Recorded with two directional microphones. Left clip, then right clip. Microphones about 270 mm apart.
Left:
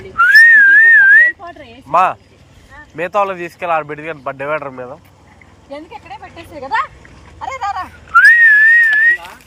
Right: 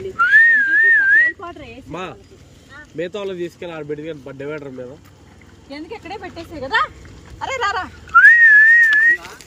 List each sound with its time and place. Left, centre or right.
0.2 s whistling: centre
1.9 s speech: centre
7.3 s speech: right
8.1 s whistling: centre